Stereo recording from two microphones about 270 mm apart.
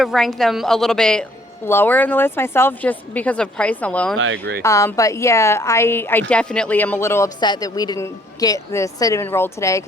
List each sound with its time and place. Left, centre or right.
0.0 s a woman's voice: centre
4.2 s speech: right
4.6 s a woman's voice: centre